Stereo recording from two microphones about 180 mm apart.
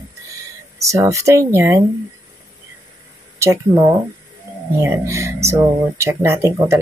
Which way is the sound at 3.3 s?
15° right (ahead or behind).